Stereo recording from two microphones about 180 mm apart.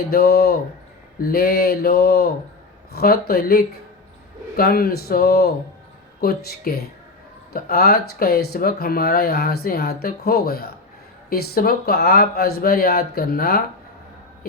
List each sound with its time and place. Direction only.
0.1 s speech: 60° left (ahead or behind)